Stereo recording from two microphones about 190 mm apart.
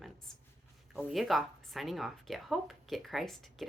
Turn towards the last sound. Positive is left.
turn(degrees=0)  # may be behind; listen again after turning